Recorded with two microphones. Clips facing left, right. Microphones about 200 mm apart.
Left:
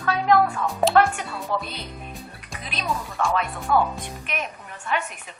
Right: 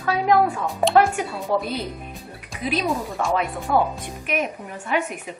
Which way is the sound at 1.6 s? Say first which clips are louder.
Right 9 dB; 5° right (ahead or behind).